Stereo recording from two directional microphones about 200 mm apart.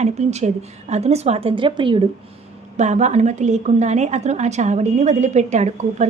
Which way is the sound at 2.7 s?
35° right (ahead or behind).